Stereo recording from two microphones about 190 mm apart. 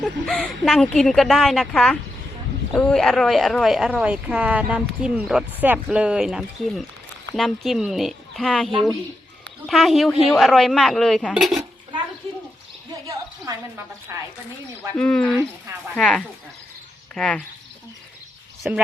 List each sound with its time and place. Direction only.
0.0 s speech: 5° left (ahead or behind)
13.1 s a woman's voice: 15° right (ahead or behind)
14.9 s speech: 5° left (ahead or behind)
18.6 s speech: 5° right (ahead or behind)